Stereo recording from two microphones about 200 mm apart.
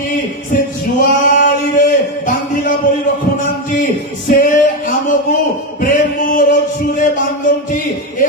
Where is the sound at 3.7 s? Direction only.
40° left (ahead or behind).